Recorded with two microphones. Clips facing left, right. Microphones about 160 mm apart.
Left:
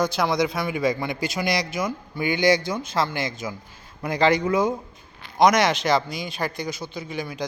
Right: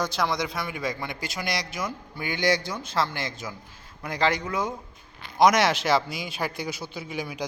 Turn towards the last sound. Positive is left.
turn(degrees=-10)  # may be behind; listen again after turning